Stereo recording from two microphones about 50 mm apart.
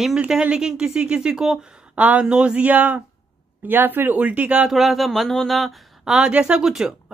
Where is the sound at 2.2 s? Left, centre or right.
Centre.